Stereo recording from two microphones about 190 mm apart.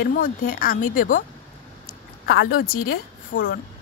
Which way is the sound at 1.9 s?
55° left (ahead or behind).